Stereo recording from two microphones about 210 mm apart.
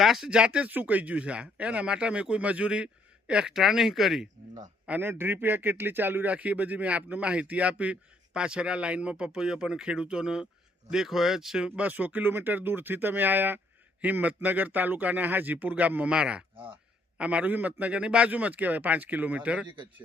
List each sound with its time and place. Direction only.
0.0 s a man's voice: centre (ahead or behind)
19.6 s a man's voice: 25° right (ahead or behind)